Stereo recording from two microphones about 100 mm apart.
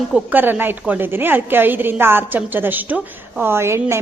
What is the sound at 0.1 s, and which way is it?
A woman's voice, 20° right (ahead or behind).